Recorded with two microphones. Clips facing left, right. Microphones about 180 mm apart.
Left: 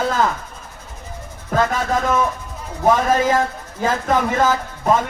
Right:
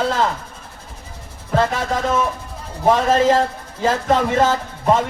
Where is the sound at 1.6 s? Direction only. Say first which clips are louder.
Even; 25° right (ahead or behind).